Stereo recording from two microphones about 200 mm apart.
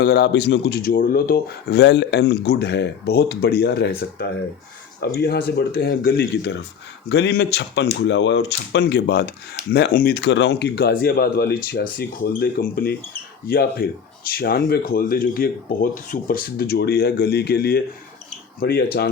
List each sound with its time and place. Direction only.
0.0 s speech: 55° left (ahead or behind)